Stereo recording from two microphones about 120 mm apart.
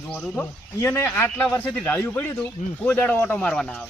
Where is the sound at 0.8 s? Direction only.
20° left (ahead or behind).